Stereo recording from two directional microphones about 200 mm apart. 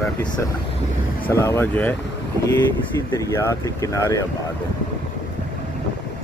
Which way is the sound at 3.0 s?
15° left (ahead or behind).